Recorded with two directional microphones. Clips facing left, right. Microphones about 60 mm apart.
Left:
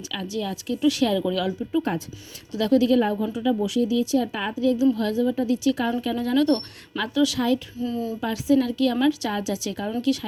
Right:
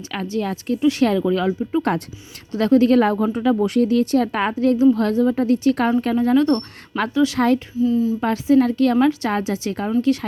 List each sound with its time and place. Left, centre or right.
0.1 s a woman's voice: right
3.0 s speech: right
3.6 s speech: right
6.1 s a woman's voice: right
7.3 s speech: right
7.8 s speech: centre
8.2 s a woman's voice: right